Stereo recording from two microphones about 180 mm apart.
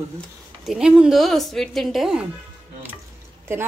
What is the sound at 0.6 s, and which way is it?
Speech, 5° right (ahead or behind).